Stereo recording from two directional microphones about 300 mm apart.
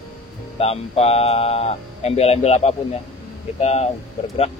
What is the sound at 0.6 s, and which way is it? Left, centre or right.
Speech, centre.